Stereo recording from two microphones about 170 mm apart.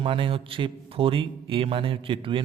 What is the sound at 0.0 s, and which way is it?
A man's voice, 30° right (ahead or behind).